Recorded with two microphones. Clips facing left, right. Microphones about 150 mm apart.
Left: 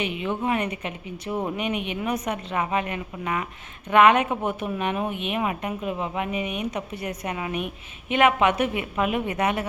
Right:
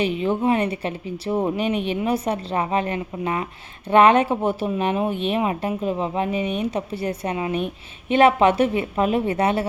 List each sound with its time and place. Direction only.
0.0 s speech: 35° right (ahead or behind)